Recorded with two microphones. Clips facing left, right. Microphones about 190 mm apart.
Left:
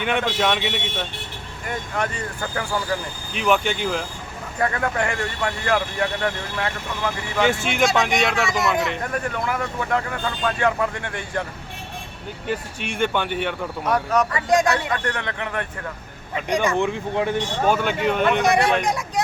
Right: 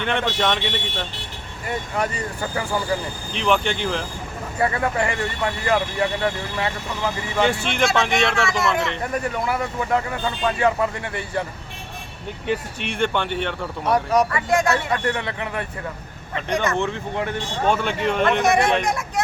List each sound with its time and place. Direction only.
0.0 s speech: 10° left (ahead or behind)
1.7 s speech: 10° right (ahead or behind)
3.3 s speech: 5° left (ahead or behind)
4.6 s speech: 5° right (ahead or behind)
8.4 s speech: 15° left (ahead or behind)
9.3 s speech: 10° right (ahead or behind)
12.5 s speech: centre (ahead or behind)
13.8 s speech: 10° right (ahead or behind)
14.3 s speech: 15° left (ahead or behind)
15.0 s speech: 10° right (ahead or behind)
16.3 s speech: 10° left (ahead or behind)
17.7 s speech: 5° left (ahead or behind)